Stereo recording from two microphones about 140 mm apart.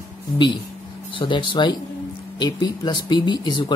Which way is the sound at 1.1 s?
35° left (ahead or behind).